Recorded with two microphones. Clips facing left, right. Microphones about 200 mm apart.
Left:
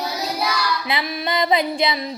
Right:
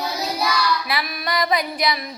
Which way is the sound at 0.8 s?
25° left (ahead or behind).